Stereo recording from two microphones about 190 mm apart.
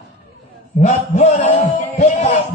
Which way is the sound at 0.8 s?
35° left (ahead or behind).